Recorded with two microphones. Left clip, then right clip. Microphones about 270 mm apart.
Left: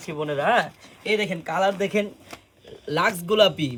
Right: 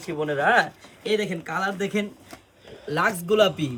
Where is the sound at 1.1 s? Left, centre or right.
Centre.